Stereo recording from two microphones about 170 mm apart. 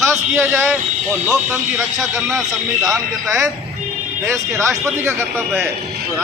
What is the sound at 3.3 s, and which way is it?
A man's voice, 20° right (ahead or behind).